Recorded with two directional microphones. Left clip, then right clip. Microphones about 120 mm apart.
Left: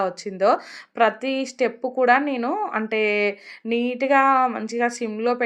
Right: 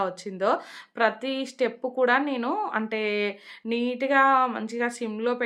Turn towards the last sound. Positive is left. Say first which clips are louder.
# left 4 dB
turn(degrees=25)  # may be behind; listen again after turning